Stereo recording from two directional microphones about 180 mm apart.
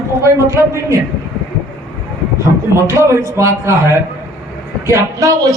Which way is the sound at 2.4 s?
15° right (ahead or behind).